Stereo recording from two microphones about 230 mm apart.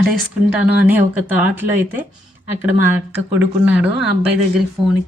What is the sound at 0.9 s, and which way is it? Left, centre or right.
Speech, centre.